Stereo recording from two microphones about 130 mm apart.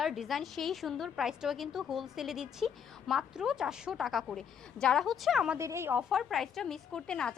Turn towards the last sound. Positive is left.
turn(degrees=5)  # may be behind; listen again after turning